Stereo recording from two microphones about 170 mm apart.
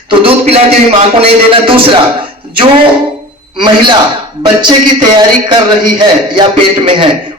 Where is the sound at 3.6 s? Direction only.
25° right (ahead or behind).